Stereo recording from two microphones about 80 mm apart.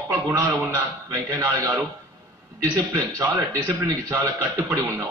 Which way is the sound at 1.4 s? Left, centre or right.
Right.